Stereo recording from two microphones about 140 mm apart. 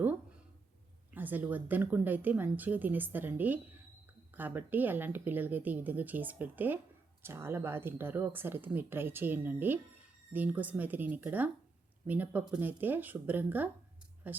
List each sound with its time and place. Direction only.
1.1 s speech: 10° right (ahead or behind)